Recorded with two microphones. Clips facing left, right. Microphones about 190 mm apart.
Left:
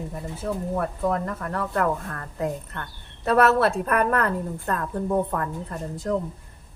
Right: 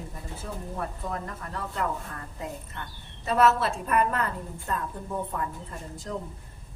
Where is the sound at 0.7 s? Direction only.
60° left (ahead or behind).